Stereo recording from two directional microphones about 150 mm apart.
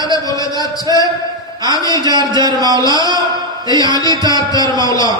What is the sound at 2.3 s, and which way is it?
Speech, 25° right (ahead or behind).